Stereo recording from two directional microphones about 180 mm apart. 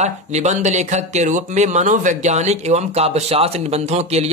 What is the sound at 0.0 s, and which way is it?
A man's voice, 40° right (ahead or behind).